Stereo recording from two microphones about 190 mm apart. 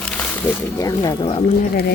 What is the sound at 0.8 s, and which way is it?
Speech, 20° left (ahead or behind).